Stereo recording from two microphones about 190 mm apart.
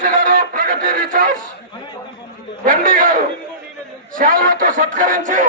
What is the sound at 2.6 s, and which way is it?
A man's voice, 45° right (ahead or behind).